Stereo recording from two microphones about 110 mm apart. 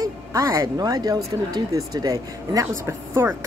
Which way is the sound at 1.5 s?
35° right (ahead or behind).